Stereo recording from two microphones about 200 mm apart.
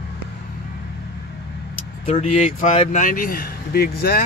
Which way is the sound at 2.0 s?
30° left (ahead or behind).